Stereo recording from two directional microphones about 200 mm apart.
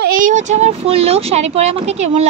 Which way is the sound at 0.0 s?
40° right (ahead or behind).